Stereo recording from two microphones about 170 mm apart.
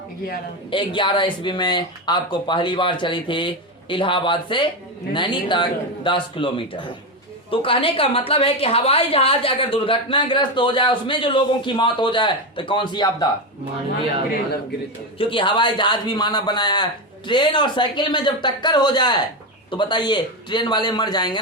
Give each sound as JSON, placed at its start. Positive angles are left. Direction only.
{"t": 0.7, "sound": "a man's voice", "side_deg": 30}
{"t": 15.2, "sound": "a man's voice", "side_deg": 30}